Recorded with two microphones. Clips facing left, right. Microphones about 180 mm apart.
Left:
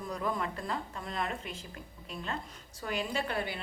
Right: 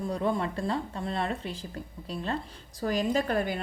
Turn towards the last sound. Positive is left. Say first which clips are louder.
# right 7 dB
turn(degrees=-45)  # may be behind; listen again after turning